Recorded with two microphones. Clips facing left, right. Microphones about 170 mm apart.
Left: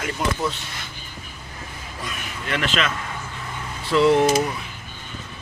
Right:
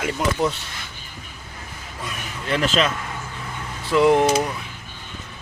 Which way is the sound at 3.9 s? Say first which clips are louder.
Right 1 dB; 15° right (ahead or behind).